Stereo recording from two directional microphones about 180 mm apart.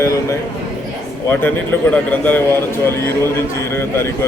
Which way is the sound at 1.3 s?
10° left (ahead or behind).